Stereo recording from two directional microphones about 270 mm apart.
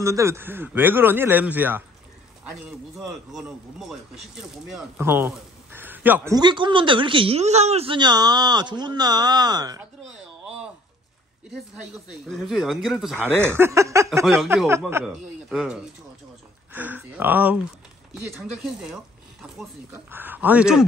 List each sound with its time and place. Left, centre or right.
0.0 s speech: centre
12.3 s speech: centre